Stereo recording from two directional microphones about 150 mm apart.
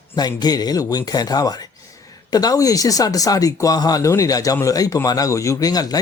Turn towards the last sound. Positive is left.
turn(degrees=25)  # may be behind; listen again after turning